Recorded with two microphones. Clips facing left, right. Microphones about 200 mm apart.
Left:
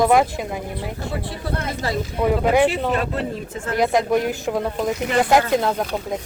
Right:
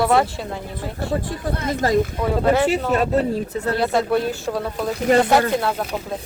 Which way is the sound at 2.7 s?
40° right (ahead or behind).